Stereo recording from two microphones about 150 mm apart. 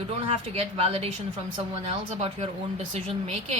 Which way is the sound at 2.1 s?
45° right (ahead or behind).